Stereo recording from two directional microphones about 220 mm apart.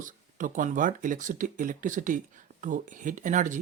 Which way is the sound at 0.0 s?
35° right (ahead or behind).